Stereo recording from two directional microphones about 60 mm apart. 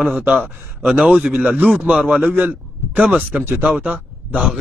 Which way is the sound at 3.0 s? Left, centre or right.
Centre.